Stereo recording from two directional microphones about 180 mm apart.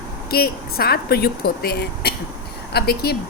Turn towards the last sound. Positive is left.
turn(degrees=60)  # may be behind; listen again after turning